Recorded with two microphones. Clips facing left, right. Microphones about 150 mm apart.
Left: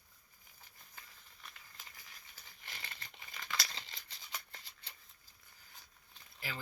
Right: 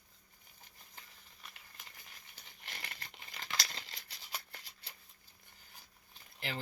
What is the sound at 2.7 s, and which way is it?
Crumpling, 40° right (ahead or behind).